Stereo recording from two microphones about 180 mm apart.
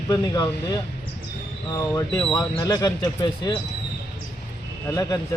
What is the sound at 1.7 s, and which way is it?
Speech, 20° left (ahead or behind).